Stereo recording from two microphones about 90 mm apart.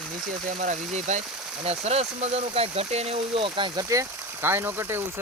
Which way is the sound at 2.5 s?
90° right.